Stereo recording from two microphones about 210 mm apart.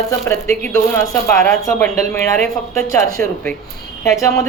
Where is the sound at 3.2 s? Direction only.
5° left (ahead or behind).